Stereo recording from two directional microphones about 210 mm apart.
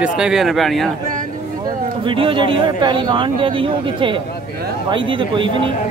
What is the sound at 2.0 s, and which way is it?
Speech, 25° right (ahead or behind).